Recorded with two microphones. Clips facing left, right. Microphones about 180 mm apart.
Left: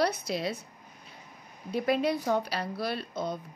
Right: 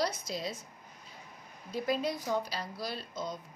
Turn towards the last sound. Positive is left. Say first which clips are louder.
# left 5 dB
turn(degrees=60)  # may be behind; listen again after turning